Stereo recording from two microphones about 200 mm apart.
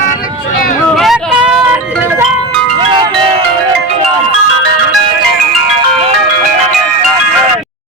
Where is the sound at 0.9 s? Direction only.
Centre (ahead or behind).